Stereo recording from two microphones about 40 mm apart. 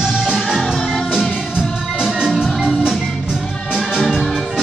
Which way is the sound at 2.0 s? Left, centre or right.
Centre.